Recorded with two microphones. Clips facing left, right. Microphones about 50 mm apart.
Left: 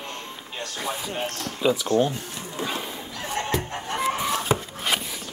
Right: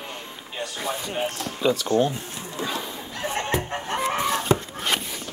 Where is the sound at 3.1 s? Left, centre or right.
Right.